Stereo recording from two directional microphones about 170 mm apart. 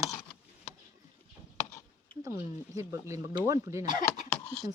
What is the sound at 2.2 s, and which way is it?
Speech, 20° right (ahead or behind).